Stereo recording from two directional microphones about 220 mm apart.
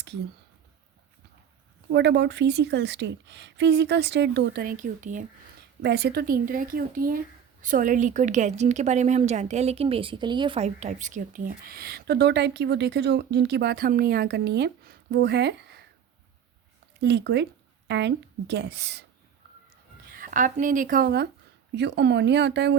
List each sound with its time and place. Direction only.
1.9 s a woman's voice: 50° right (ahead or behind)
5.8 s a woman's voice: 50° right (ahead or behind)
17.0 s a woman's voice: 50° right (ahead or behind)
20.1 s a woman's voice: 40° right (ahead or behind)